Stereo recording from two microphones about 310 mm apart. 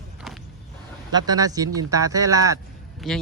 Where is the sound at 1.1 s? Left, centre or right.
Centre.